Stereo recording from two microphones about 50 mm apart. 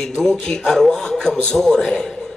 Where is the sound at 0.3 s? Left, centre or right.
Centre.